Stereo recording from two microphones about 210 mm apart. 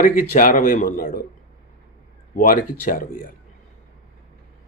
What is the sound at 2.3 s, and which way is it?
Speech, 40° left (ahead or behind).